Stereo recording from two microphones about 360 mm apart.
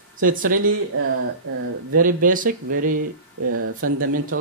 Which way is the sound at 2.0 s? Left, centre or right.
Right.